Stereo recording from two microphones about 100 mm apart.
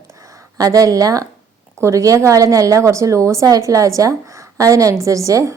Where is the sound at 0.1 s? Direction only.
35° right (ahead or behind).